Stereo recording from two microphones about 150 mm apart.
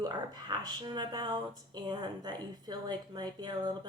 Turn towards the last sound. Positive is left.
turn(degrees=-30)  # may be behind; listen again after turning